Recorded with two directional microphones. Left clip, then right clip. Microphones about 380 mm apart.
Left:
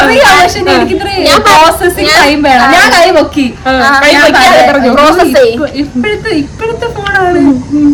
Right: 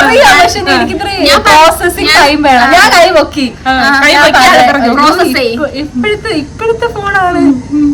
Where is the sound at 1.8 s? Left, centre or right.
Centre.